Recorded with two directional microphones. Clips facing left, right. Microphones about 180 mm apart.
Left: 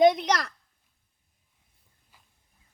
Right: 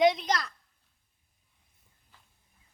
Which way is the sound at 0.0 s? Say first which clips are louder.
Left 4 dB; 50° left (ahead or behind).